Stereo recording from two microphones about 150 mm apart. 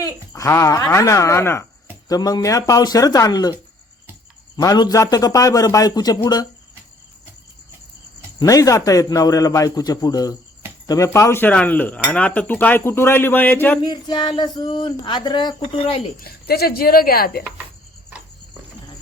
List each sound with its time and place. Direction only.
0.0 s a man's voice: 20° left (ahead or behind)
4.5 s a man's voice: 25° left (ahead or behind)
8.4 s a man's voice: 25° left (ahead or behind)
10.8 s cutlery: 20° left (ahead or behind)
13.8 s speech: 30° left (ahead or behind)
16.2 s speech: 90° left